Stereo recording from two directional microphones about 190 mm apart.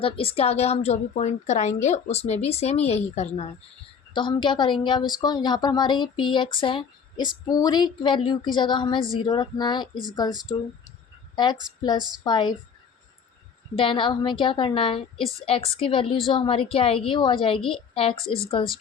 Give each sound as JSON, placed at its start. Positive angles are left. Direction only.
{"t": 0.0, "sound": "a woman's voice", "side_deg": 30}
{"t": 11.8, "sound": "speech", "side_deg": 20}
{"t": 13.7, "sound": "speech", "side_deg": 25}